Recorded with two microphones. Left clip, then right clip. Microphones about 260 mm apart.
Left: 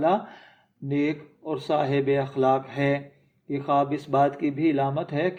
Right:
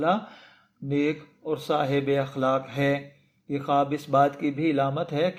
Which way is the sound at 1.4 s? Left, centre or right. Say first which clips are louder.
Left 1 dB; right.